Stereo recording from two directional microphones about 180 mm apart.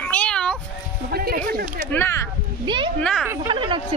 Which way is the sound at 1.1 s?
60° right (ahead or behind).